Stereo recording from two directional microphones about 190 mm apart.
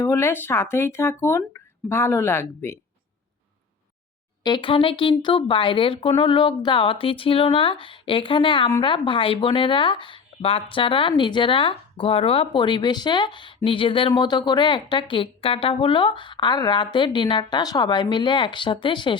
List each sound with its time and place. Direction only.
0.0 s speech: 15° left (ahead or behind)
4.4 s speech: 25° left (ahead or behind)